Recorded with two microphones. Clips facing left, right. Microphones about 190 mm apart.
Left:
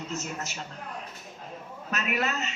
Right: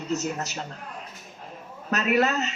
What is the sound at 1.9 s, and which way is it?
Speech, 35° right (ahead or behind).